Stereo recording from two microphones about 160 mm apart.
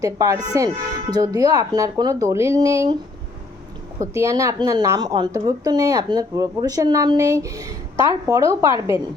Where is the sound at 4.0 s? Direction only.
20° right (ahead or behind).